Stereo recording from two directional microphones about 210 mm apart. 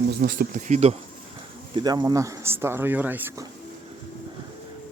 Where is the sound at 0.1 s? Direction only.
50° right (ahead or behind); by 0.9 s 30° right (ahead or behind).